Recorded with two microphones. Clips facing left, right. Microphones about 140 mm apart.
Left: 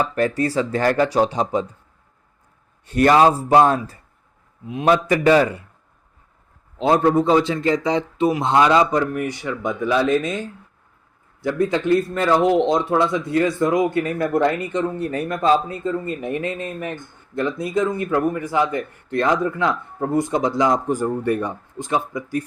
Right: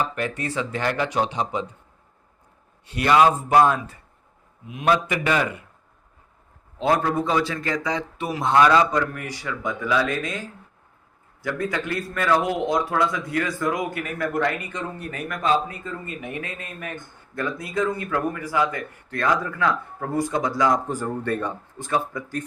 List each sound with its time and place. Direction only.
0.2 s speech: 35° left (ahead or behind)
2.8 s a man's voice: 45° left (ahead or behind)
3.2 s speech: 35° left (ahead or behind)
6.7 s speech: 25° left (ahead or behind)
11.4 s speech: 25° left (ahead or behind)